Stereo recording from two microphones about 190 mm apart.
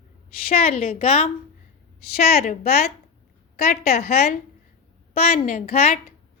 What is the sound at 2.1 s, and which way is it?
A woman's voice, 55° left (ahead or behind).